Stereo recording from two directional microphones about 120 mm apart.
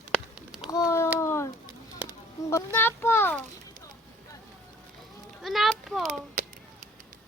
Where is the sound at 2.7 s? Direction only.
15° left (ahead or behind).